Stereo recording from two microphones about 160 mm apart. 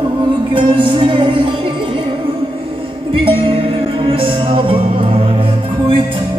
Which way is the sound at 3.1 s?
35° right (ahead or behind).